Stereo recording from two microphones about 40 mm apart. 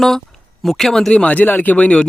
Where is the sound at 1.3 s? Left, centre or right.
Left.